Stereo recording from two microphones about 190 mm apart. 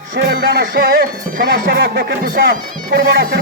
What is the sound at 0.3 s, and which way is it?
Speech, 60° right (ahead or behind).